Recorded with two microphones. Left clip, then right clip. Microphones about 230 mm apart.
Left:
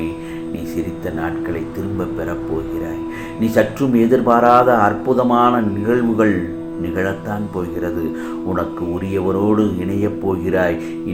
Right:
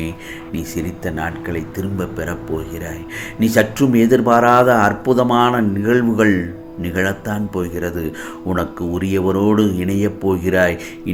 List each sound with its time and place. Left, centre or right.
0.8 s speech: right
3.4 s speech: right